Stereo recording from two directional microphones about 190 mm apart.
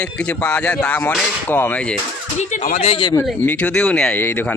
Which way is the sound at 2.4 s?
40° left (ahead or behind).